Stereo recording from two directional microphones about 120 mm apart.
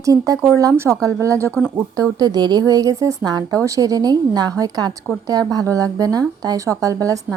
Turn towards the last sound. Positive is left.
turn(degrees=-30)  # may be behind; listen again after turning